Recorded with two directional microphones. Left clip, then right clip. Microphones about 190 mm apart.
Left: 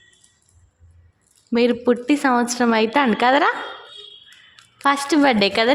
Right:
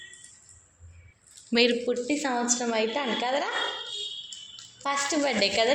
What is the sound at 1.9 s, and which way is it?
A woman's voice, 50° left (ahead or behind).